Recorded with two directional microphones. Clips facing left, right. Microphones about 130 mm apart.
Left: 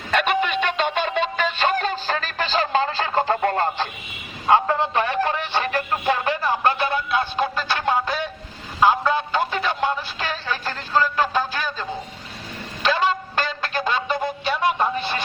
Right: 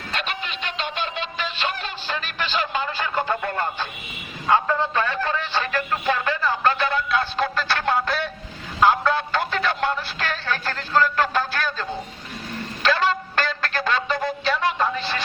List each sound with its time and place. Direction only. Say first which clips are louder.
0.1 s music: left 10 dB; 55° left (ahead or behind); by 7.3 s 25° left (ahead or behind)
7.5 s music: even; 10° left (ahead or behind)
8.8 s a sound: even; 15° left (ahead or behind)